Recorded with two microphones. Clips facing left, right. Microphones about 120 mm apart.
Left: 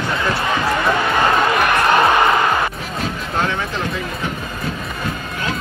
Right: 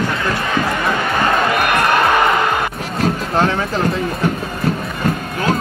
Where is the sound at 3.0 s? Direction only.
40° right (ahead or behind).